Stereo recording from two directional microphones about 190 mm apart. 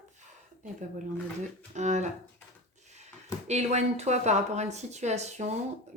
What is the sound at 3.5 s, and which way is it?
Speech, 35° right (ahead or behind).